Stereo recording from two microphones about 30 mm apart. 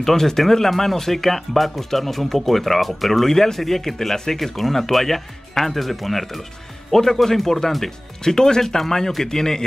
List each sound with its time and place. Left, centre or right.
0.0 s speech: centre
3.3 s speech: centre
8.2 s a man's voice: left